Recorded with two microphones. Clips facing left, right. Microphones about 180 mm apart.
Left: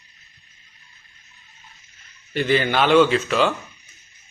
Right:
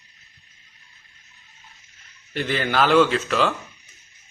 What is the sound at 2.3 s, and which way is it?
Speech, centre (ahead or behind).